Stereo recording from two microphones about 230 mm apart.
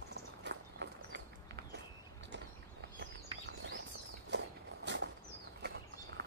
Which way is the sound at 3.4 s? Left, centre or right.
Right.